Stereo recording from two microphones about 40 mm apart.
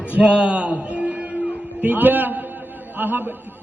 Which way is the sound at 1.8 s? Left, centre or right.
Right.